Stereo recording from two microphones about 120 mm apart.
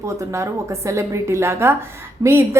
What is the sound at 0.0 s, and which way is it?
A woman's voice, 25° right (ahead or behind).